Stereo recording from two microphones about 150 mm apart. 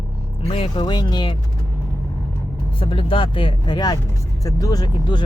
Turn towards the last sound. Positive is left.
turn(degrees=30)  # may be behind; listen again after turning